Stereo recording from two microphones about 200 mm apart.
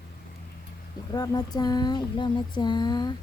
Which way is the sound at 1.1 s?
20° left (ahead or behind).